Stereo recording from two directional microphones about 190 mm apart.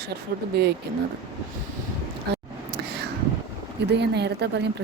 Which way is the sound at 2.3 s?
60° right (ahead or behind).